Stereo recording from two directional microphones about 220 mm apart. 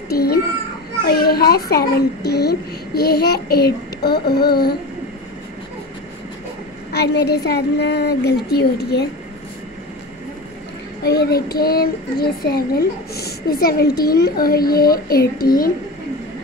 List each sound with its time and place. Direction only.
0.1 s a child's voice: 45° left (ahead or behind)
6.9 s a child's voice: 50° left (ahead or behind)
11.1 s a child's voice: 45° left (ahead or behind)